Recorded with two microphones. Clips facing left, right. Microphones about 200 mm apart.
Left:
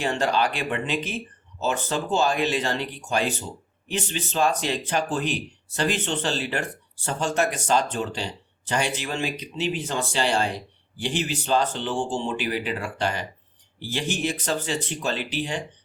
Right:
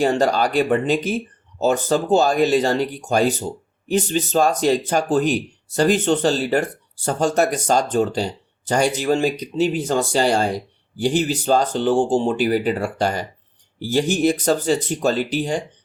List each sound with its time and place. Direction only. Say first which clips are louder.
0.0 s speech: right 6 dB; 40° right (ahead or behind)